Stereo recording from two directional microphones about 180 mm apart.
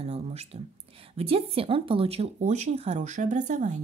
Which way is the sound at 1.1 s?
30° right (ahead or behind).